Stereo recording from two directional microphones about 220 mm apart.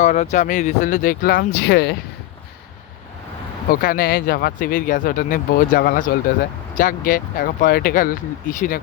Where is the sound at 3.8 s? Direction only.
40° left (ahead or behind).